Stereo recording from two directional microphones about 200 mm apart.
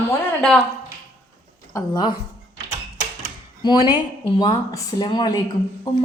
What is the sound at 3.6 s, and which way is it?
A woman's voice, 20° left (ahead or behind).